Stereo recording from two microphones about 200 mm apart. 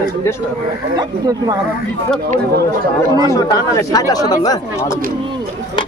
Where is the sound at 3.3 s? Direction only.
15° left (ahead or behind).